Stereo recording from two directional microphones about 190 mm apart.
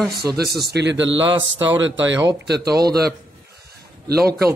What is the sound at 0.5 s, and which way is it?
Speech, 55° right (ahead or behind).